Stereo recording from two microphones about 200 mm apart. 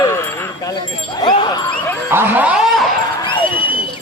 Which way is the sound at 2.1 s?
10° right (ahead or behind).